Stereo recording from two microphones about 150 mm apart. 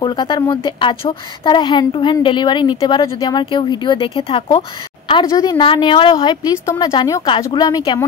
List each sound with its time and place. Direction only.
0.0 s a woman's voice: 30° left (ahead or behind)
5.2 s a woman's voice: 25° left (ahead or behind)